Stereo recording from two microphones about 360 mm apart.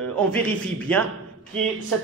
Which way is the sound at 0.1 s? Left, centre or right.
Centre.